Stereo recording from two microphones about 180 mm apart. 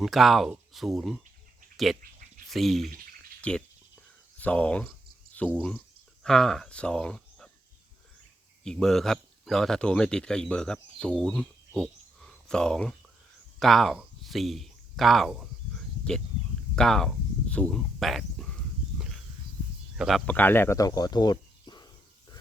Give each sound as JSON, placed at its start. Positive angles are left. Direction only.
{"t": 0.0, "sound": "speech", "side_deg": 0}
{"t": 4.4, "sound": "cricket", "side_deg": 10}
{"t": 6.2, "sound": "speech", "side_deg": 0}
{"t": 8.6, "sound": "speech", "side_deg": 5}
{"t": 13.6, "sound": "a sound", "side_deg": 0}
{"t": 16.7, "sound": "speech", "side_deg": 5}
{"t": 20.0, "sound": "speech", "side_deg": 0}